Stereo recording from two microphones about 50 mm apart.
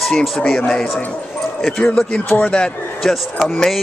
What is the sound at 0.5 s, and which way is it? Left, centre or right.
A man's voice, centre.